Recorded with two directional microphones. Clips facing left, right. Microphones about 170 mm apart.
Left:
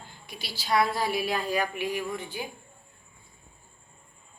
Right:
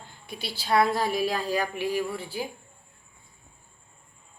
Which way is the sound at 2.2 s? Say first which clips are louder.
Right 3 dB; 35° right (ahead or behind).